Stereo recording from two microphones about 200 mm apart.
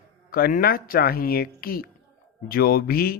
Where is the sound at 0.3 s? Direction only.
45° left (ahead or behind).